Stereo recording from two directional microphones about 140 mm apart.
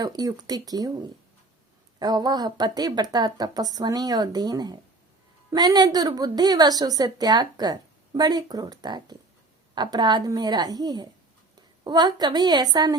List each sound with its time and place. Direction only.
0.0 s a woman's voice: 25° right (ahead or behind)
2.0 s a woman's voice: 30° right (ahead or behind)